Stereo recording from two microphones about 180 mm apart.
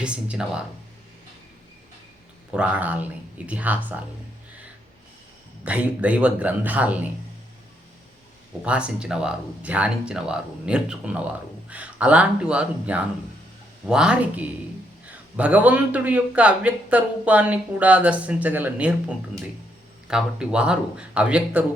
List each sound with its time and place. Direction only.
0.0 s speech: 5° right (ahead or behind)
2.5 s speech: 5° right (ahead or behind)
5.6 s speech: 10° right (ahead or behind)
8.6 s speech: 5° right (ahead or behind)